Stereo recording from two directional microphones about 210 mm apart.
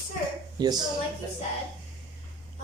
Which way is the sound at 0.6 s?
20° right (ahead or behind).